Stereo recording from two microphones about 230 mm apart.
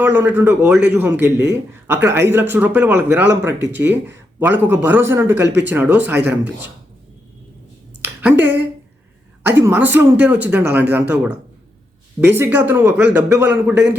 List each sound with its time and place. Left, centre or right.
0.0 s a man's voice: centre
6.2 s speech: right
8.0 s a sound: centre
9.4 s a man's voice: centre
12.2 s a man's voice: centre